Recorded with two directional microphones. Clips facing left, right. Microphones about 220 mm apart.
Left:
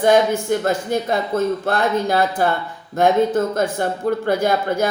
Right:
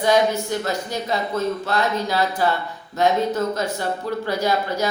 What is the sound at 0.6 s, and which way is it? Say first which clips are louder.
A woman's voice: left 6 dB; 50° left (ahead or behind).